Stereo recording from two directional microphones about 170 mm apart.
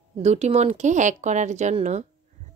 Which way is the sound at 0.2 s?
40° right (ahead or behind).